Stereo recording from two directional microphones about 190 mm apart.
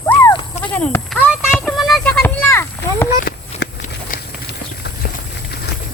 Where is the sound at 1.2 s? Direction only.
Centre (ahead or behind).